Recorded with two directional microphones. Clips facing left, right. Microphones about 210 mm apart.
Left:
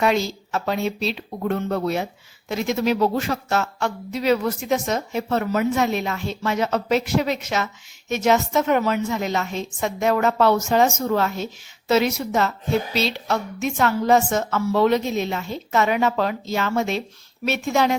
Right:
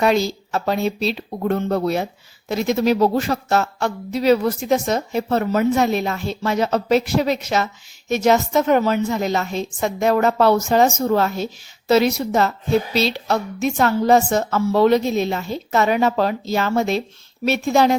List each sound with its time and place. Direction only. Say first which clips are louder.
0.0 s a woman's voice: right 3 dB; 35° right (ahead or behind)